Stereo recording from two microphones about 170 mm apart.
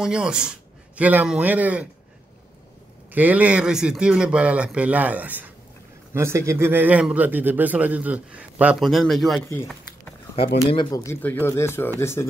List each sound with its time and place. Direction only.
0.0 s speech: 5° right (ahead or behind)
3.1 s a man's voice: 10° right (ahead or behind)
10.7 s speech: 25° left (ahead or behind)